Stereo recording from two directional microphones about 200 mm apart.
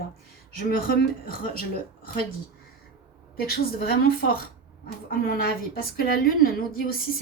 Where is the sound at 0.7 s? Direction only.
45° left (ahead or behind).